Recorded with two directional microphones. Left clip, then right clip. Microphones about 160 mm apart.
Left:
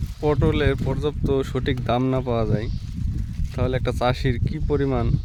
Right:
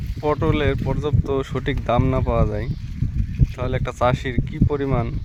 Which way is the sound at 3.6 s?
25° left (ahead or behind).